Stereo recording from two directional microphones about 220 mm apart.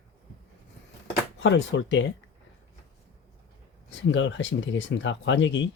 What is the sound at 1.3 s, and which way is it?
Speech, 55° left (ahead or behind).